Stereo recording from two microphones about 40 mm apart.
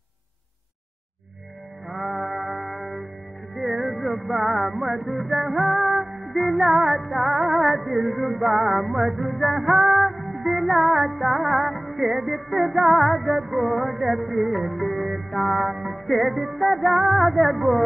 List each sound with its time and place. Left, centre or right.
1.9 s music: centre
9.8 s music: right
10.1 s music: centre